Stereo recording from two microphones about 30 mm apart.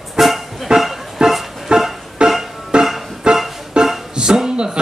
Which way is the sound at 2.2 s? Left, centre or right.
Right.